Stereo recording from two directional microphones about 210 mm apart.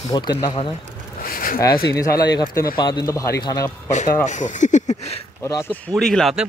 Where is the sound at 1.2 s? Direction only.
45° left (ahead or behind).